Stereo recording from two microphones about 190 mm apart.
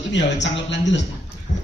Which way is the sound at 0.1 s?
70° left (ahead or behind).